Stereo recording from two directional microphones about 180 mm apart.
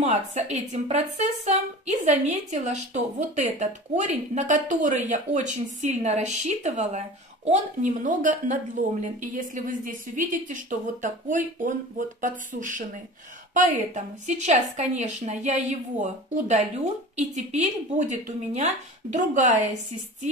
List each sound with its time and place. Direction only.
0.0 s a woman's voice: 35° right (ahead or behind)